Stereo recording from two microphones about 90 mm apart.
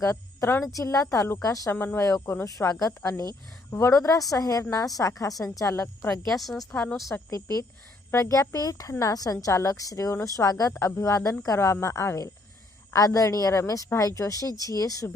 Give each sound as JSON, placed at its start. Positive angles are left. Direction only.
{"t": 0.0, "sound": "a woman's voice", "side_deg": 35}
{"t": 1.7, "sound": "speech", "side_deg": 25}
{"t": 2.0, "sound": "a woman's voice", "side_deg": 35}
{"t": 6.1, "sound": "a woman's voice", "side_deg": 5}
{"t": 7.1, "sound": "a woman's voice", "side_deg": 35}